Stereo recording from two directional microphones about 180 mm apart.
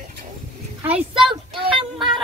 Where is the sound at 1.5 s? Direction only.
30° right (ahead or behind).